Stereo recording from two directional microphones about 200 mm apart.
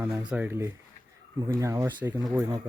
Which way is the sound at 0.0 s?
15° right (ahead or behind).